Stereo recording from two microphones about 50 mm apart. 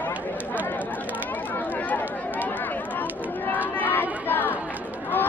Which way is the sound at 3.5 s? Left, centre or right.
Left.